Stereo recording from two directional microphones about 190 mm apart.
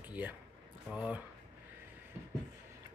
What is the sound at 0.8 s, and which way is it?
Speech, 5° right (ahead or behind).